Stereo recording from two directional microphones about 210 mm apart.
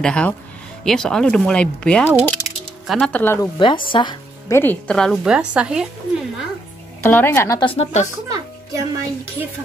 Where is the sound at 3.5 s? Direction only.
25° left (ahead or behind).